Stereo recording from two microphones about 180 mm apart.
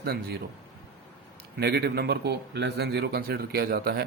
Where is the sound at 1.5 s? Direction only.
65° right (ahead or behind).